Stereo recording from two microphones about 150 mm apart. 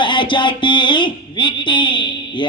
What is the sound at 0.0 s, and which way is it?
A woman's voice, 35° left (ahead or behind).